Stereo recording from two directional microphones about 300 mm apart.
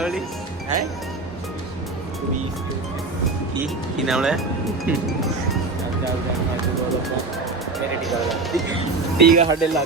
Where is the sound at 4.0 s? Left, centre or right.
Centre.